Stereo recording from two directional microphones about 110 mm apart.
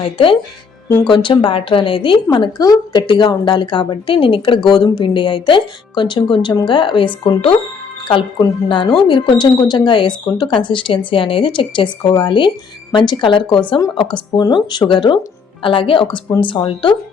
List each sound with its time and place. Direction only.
0.0 s a woman's voice: 50° left (ahead or behind)
2.3 s a woman's voice: 40° left (ahead or behind)